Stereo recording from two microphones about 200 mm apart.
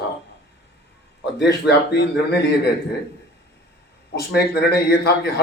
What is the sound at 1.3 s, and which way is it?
Speech, 55° left (ahead or behind).